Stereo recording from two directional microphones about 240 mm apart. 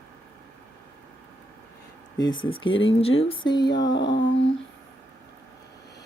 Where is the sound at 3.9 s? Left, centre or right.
Left.